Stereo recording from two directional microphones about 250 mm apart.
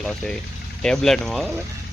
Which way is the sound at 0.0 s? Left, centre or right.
Centre.